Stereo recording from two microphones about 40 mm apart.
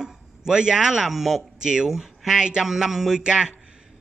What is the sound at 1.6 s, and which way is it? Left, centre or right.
A man's voice, centre.